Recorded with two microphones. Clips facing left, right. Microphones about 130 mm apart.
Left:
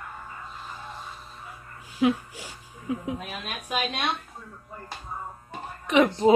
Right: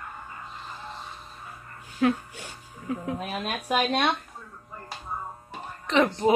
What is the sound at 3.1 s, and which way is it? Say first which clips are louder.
Speech: right 5 dB; 35° right (ahead or behind).